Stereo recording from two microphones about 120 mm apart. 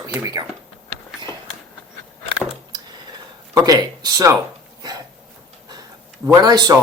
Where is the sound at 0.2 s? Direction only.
30° right (ahead or behind).